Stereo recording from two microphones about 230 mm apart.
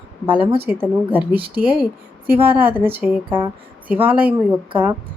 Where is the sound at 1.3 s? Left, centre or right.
Right.